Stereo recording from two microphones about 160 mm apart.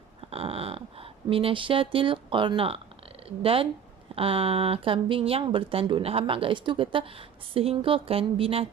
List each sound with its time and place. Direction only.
0.2 s speech: 35° right (ahead or behind)